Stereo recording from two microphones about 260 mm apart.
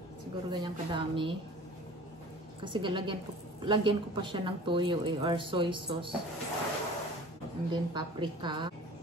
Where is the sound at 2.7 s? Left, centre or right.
Centre.